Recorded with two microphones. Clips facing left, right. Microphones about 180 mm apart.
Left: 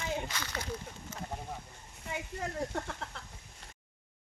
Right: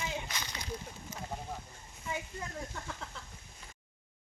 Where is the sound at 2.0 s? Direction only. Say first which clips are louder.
Left 2 dB; 65° left (ahead or behind).